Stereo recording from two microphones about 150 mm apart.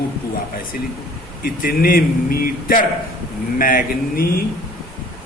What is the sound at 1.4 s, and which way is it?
Speech, 75° left (ahead or behind).